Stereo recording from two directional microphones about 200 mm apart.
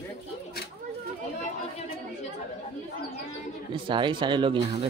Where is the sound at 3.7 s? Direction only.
25° right (ahead or behind).